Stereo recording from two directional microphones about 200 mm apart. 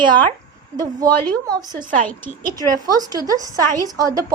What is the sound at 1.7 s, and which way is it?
Speech, 40° right (ahead or behind).